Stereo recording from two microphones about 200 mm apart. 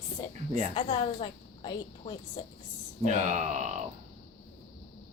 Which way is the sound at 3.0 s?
35° right (ahead or behind).